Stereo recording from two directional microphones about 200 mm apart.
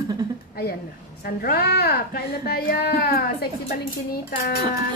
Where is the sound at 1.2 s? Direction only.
50° left (ahead or behind).